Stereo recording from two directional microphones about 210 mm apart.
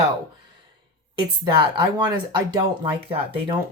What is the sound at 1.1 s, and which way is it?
Speech, 20° right (ahead or behind).